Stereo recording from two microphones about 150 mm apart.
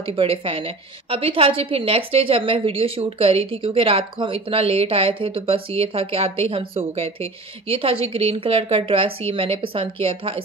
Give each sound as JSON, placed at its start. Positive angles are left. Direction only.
{"t": 0.0, "sound": "a woman's voice", "side_deg": -35}